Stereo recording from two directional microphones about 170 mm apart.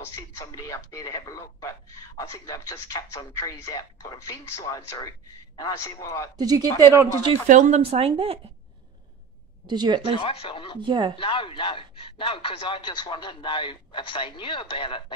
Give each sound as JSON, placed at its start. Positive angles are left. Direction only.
{"t": 0.4, "sound": "speech", "side_deg": 20}
{"t": 6.3, "sound": "speech", "side_deg": -20}
{"t": 7.4, "sound": "speech", "side_deg": -45}
{"t": 9.7, "sound": "speech", "side_deg": -25}
{"t": 10.1, "sound": "speech", "side_deg": 30}
{"t": 10.8, "sound": "speech", "side_deg": -30}
{"t": 11.1, "sound": "speech", "side_deg": 30}